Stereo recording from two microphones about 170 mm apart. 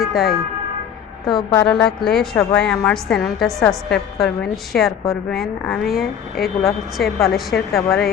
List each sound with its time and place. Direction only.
0.0 s a woman's voice: centre (ahead or behind)
1.3 s a woman's voice: 25° left (ahead or behind)
1.6 s a woman's voice: 5° left (ahead or behind)
5.9 s speech: 60° left (ahead or behind)
6.9 s a woman's voice: centre (ahead or behind)